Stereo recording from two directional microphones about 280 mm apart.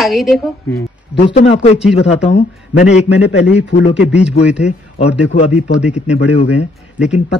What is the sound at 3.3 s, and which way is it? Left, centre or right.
Speech, left.